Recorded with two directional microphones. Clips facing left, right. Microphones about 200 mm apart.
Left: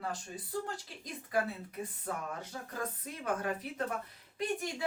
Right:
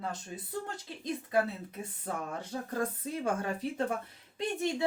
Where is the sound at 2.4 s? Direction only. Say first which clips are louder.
Right 6 dB; 30° right (ahead or behind).